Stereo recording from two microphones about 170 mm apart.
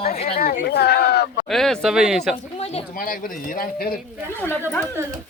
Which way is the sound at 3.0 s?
55° left (ahead or behind).